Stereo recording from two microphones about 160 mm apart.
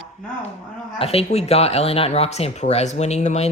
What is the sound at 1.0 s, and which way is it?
Speech, 40° left (ahead or behind).